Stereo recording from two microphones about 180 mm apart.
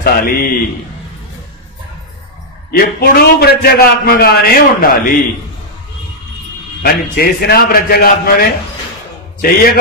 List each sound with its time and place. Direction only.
0.0 s a man's voice: 55° left (ahead or behind)
2.8 s a man's voice: 60° left (ahead or behind)
6.8 s a man's voice: 60° left (ahead or behind)